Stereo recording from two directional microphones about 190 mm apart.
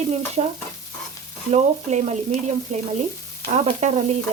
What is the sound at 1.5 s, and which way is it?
Frying, 35° right (ahead or behind).